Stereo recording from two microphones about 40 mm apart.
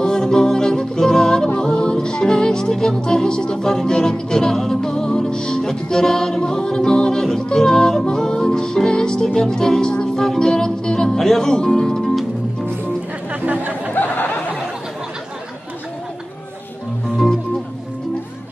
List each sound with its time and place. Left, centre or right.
0.0 s music: centre
13.3 s chatter: right
14.0 s a sound: left